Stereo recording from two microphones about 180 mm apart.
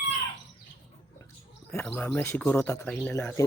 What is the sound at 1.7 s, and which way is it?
Speech, 5° left (ahead or behind).